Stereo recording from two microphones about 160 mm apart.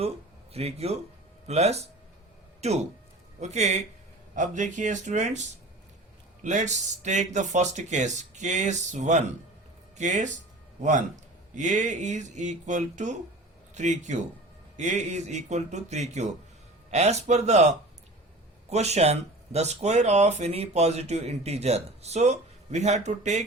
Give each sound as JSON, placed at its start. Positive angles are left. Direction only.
{"t": 0.5, "sound": "speech", "side_deg": -40}
{"t": 11.5, "sound": "speech", "side_deg": -45}